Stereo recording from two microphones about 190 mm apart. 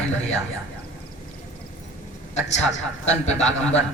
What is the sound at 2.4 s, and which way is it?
Speech, 35° left (ahead or behind).